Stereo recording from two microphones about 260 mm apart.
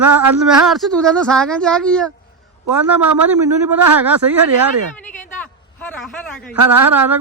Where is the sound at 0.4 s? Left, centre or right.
Centre.